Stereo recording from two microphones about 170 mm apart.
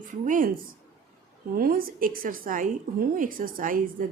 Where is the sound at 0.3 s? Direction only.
55° right (ahead or behind).